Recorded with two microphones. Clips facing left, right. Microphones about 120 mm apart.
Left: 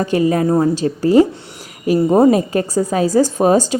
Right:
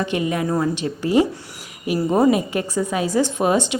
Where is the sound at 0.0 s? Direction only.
35° left (ahead or behind).